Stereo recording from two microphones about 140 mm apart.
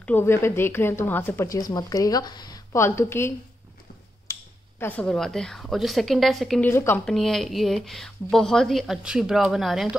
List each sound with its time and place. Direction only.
0.0 s speech: 15° left (ahead or behind)
6.6 s speech: 15° left (ahead or behind)
7.1 s a woman's voice: centre (ahead or behind)